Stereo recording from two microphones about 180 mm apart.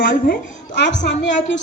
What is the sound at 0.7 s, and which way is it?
Speech, 75° left (ahead or behind).